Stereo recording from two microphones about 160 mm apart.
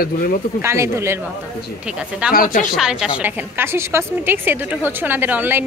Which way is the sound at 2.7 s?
5° right (ahead or behind).